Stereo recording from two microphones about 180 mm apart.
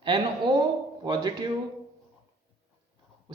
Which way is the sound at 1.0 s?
25° right (ahead or behind).